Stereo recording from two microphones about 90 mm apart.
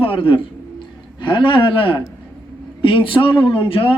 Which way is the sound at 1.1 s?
60° left (ahead or behind).